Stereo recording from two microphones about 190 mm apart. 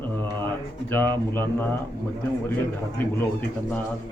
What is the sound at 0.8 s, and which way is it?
Speech, 10° left (ahead or behind).